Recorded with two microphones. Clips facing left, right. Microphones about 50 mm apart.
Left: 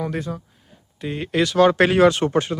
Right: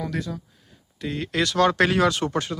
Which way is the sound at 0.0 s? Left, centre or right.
Left.